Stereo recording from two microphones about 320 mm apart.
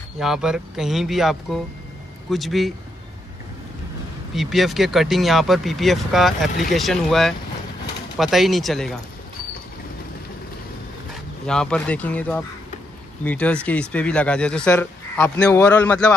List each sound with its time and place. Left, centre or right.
0.2 s speech: centre
4.4 s speech: centre
11.4 s speech: centre